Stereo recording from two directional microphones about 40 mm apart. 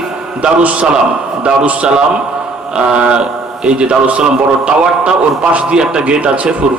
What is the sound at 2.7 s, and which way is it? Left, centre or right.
A man's voice, right.